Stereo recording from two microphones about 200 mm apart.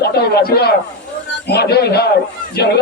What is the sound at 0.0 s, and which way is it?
A man's voice, 50° left (ahead or behind).